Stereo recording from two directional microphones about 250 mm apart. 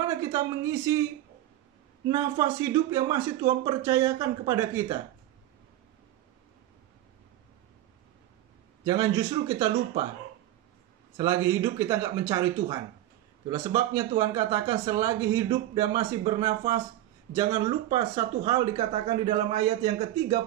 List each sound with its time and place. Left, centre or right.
0.3 s speech: centre
2.0 s speech: centre
8.8 s speech: centre
11.1 s a man's voice: centre